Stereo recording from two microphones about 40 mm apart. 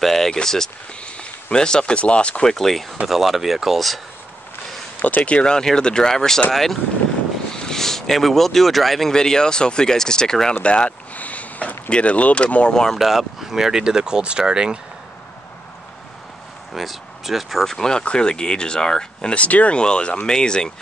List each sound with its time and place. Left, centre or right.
0.0 s a sound: centre
1.0 s speech: left
2.4 s speech: centre
3.1 s speech: centre
5.0 s speech: left; by 9.1 s centre
9.1 s speech: centre
10.6 s speech: left
11.1 s a sound: left
11.9 s speech: left
12.9 s speech: centre
16.7 s speech: centre
17.6 s speech: centre
19.3 s speech: left
19.8 s speech: left